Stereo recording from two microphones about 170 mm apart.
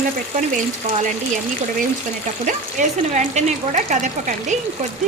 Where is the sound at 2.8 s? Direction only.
45° right (ahead or behind).